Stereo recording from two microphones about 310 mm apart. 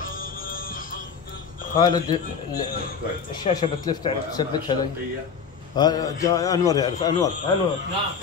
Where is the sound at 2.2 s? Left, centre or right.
Left.